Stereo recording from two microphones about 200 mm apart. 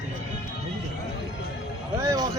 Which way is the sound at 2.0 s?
15° right (ahead or behind).